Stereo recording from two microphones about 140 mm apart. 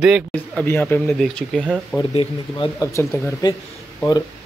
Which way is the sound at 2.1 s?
40° left (ahead or behind).